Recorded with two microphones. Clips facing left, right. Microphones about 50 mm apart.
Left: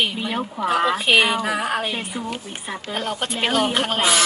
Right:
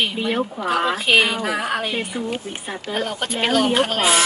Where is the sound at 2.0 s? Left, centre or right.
Centre.